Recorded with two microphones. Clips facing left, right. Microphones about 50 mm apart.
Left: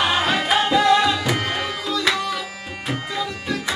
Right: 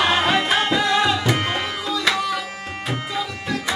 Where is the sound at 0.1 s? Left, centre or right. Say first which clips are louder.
Right 1 dB; centre.